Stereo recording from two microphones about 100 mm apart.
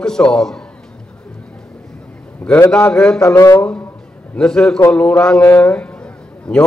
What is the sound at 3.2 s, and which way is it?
Speech, 35° left (ahead or behind).